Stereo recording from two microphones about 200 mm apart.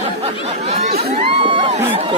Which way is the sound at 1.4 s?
25° right (ahead or behind).